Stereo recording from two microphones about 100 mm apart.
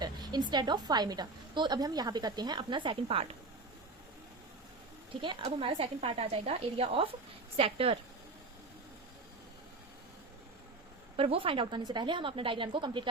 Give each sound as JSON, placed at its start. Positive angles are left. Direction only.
{"t": 0.0, "sound": "a woman's voice", "side_deg": -45}
{"t": 5.2, "sound": "a woman's voice", "side_deg": -55}
{"t": 11.2, "sound": "a woman's voice", "side_deg": -70}